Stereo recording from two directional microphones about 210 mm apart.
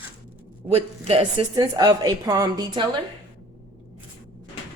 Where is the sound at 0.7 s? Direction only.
30° right (ahead or behind).